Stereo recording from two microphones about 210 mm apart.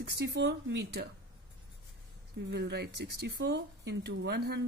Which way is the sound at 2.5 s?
50° right (ahead or behind).